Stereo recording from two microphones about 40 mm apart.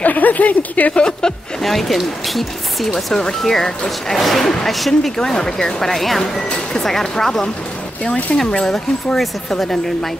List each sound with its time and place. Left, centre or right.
0.0 s speech: left
0.9 s speech: left
1.6 s speech: centre
3.4 s speech: centre
5.1 s speech: centre